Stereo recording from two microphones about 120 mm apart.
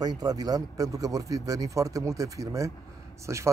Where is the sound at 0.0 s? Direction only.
35° right (ahead or behind).